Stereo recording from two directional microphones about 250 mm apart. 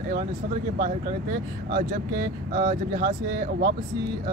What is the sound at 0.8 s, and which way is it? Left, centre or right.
Speech, right.